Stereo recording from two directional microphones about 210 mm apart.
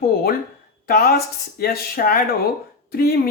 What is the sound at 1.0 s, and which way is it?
Speech, 45° left (ahead or behind).